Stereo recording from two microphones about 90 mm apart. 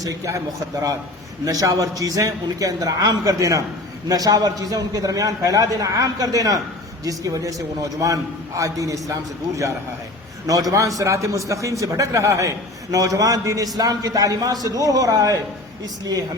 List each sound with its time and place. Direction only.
0.0 s a man's voice: 40° right (ahead or behind)
10.4 s a man's voice: 40° right (ahead or behind)